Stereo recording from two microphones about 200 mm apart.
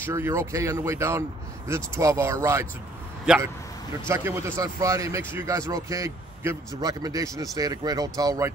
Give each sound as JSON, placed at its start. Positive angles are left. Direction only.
{"t": 0.0, "sound": "speech", "side_deg": -10}
{"t": 3.3, "sound": "speech", "side_deg": -5}